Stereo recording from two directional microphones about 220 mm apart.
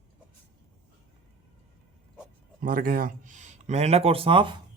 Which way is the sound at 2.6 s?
40° right (ahead or behind).